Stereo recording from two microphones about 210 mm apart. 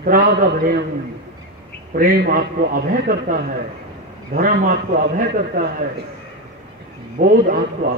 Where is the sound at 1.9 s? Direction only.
45° right (ahead or behind).